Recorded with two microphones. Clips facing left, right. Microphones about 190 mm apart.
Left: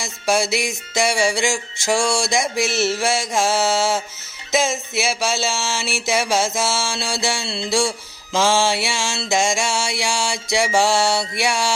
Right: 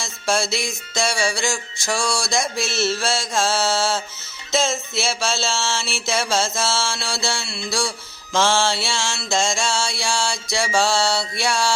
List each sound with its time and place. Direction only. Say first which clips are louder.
0.0 s music: left 3 dB; 15° left (ahead or behind)
7.4 s music: left 5 dB; 30° left (ahead or behind)
8.4 s music: left 2 dB; 10° left (ahead or behind)